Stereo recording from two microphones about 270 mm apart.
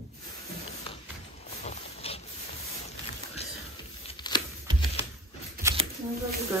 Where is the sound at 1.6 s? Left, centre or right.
Left.